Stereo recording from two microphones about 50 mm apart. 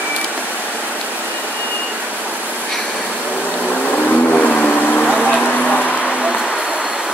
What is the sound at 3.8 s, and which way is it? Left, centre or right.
Vehicle, left.